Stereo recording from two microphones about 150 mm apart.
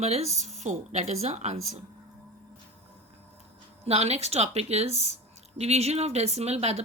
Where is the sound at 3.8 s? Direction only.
45° right (ahead or behind).